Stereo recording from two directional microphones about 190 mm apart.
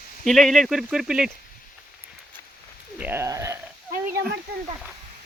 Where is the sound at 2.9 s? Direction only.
10° right (ahead or behind).